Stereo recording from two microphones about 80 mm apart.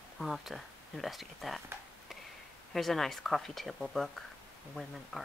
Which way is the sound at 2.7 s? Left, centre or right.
Centre.